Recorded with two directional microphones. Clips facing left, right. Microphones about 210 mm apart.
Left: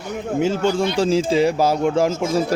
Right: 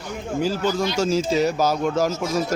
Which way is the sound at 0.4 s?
25° left (ahead or behind).